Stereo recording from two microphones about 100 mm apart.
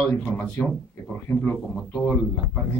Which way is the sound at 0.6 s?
5° left (ahead or behind).